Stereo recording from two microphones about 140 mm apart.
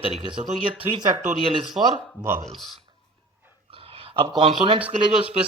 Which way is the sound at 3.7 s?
40° right (ahead or behind).